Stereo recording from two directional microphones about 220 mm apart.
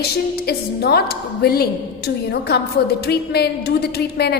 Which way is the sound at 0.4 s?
45° left (ahead or behind).